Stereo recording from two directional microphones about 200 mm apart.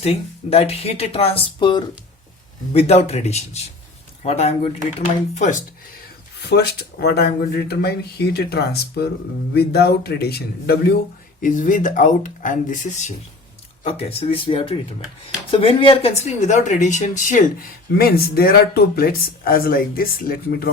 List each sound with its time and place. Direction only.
0.0 s speech: 30° left (ahead or behind)
6.5 s speech: 55° left (ahead or behind)
11.3 s speech: 40° left (ahead or behind)